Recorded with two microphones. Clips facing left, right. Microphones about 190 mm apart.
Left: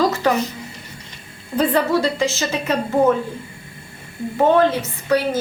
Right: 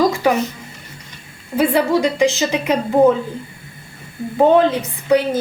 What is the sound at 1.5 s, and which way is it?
A woman's voice, 10° right (ahead or behind).